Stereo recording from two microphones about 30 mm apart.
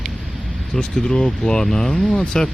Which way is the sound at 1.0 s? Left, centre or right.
Left.